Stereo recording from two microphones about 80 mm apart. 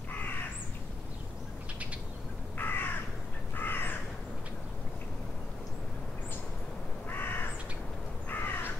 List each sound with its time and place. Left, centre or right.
2.6 s crow: left
7.1 s crow: left